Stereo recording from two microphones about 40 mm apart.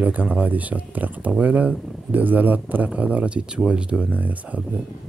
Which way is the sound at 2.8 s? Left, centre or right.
Right.